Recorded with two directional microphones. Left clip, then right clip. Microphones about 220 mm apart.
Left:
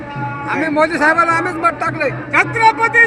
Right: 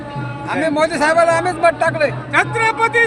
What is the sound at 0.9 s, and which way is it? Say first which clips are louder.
Speech: even; 65° right (ahead or behind).